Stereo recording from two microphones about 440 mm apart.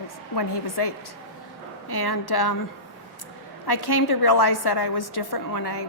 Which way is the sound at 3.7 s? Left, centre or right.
Left.